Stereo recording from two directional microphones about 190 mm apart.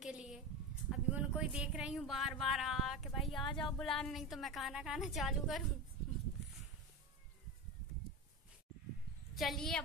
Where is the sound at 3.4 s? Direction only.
25° left (ahead or behind).